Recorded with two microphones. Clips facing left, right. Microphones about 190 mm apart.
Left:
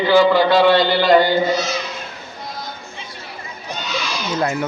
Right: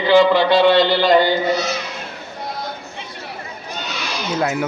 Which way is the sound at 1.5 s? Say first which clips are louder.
Right 1 dB; 60° right (ahead or behind).